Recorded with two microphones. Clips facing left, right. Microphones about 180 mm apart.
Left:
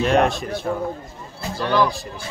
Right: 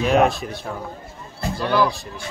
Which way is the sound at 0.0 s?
Centre (ahead or behind).